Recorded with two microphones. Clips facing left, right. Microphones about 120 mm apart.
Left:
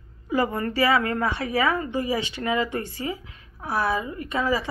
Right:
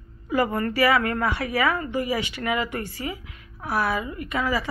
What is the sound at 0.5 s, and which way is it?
A woman's voice, 25° left (ahead or behind).